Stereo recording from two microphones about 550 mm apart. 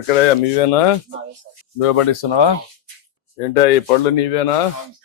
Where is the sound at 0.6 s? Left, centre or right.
Left.